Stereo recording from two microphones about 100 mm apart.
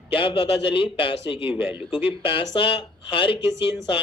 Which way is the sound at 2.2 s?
60° left (ahead or behind).